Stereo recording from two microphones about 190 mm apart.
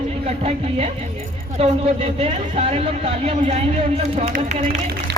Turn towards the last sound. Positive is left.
turn(degrees=-35)  # may be behind; listen again after turning